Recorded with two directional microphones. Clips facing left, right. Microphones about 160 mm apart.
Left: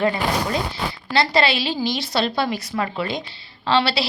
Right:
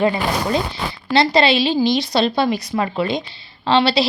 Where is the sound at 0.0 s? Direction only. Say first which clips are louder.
Right 2 dB; 20° right (ahead or behind).